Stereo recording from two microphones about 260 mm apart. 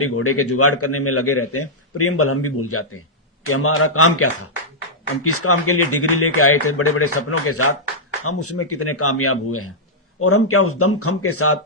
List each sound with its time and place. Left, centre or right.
0.0 s a man's voice: left